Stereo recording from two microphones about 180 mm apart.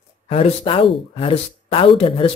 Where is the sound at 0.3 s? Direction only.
30° left (ahead or behind).